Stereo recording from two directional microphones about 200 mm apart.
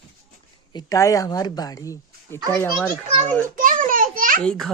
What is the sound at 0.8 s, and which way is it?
Speech, 15° left (ahead or behind).